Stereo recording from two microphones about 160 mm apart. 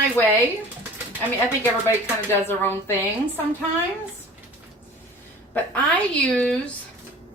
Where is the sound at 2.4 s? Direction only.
15° left (ahead or behind).